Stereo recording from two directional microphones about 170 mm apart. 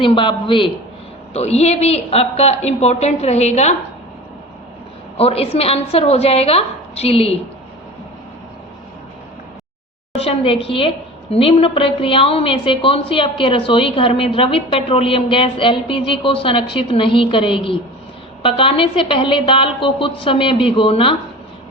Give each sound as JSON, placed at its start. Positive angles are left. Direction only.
{"t": 0.0, "sound": "a woman's voice", "side_deg": 30}
{"t": 5.1, "sound": "a woman's voice", "side_deg": 35}
{"t": 10.2, "sound": "a woman's voice", "side_deg": 35}